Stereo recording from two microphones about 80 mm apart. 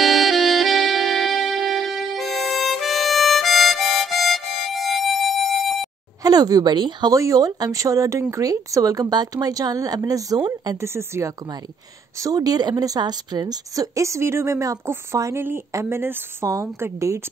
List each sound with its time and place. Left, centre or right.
0.0 s saxophone: centre
6.2 s speech: right
7.2 s speech: right
10.8 s speech: right
12.2 s speech: right